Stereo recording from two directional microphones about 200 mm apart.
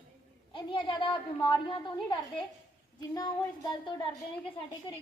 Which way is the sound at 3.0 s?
20° left (ahead or behind).